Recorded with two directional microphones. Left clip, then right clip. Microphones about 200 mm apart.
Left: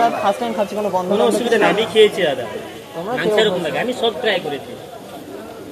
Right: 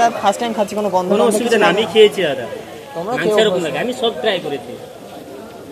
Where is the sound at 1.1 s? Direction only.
35° right (ahead or behind).